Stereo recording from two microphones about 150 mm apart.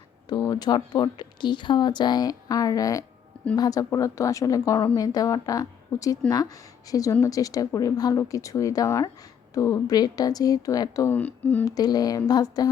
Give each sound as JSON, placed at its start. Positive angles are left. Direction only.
{"t": 0.3, "sound": "speech", "side_deg": 25}
{"t": 11.1, "sound": "speech", "side_deg": 10}
{"t": 11.6, "sound": "speech", "side_deg": 25}